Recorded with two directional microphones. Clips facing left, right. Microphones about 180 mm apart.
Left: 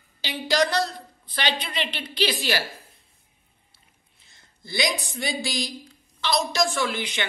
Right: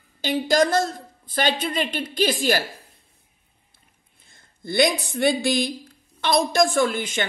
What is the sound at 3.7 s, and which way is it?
A woman's voice, 55° right (ahead or behind).